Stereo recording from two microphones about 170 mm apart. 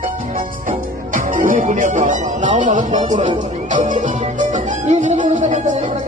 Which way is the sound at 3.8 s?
45° right (ahead or behind).